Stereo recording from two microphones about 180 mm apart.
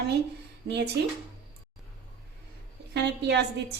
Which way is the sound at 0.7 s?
70° right (ahead or behind).